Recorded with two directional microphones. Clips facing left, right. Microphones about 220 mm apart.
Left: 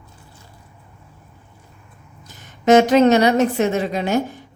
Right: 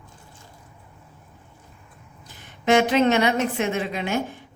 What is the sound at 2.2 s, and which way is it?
A woman's voice, 45° left (ahead or behind).